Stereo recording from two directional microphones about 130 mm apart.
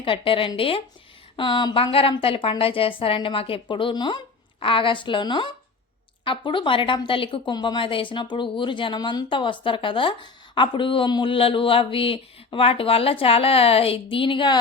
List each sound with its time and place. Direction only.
0.0 s a woman's voice: 45° left (ahead or behind)